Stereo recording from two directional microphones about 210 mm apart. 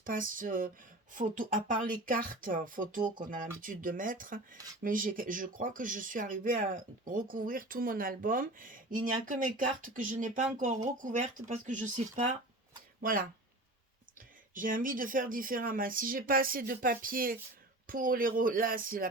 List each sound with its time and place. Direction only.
0.0 s speech: 40° right (ahead or behind)
14.5 s speech: 40° right (ahead or behind)